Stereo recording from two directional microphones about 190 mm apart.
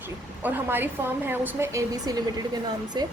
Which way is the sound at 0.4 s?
10° right (ahead or behind).